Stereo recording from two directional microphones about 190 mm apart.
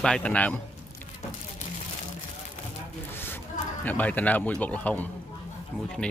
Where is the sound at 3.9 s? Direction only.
10° left (ahead or behind).